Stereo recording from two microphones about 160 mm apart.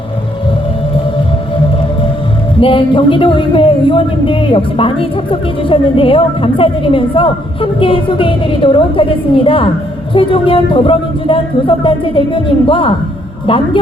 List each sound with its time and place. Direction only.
2.6 s a man's voice: 35° left (ahead or behind)